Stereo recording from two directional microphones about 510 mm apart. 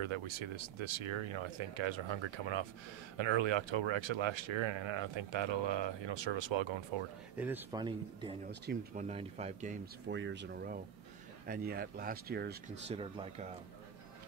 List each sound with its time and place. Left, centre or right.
0.0 s speech: right
7.3 s speech: centre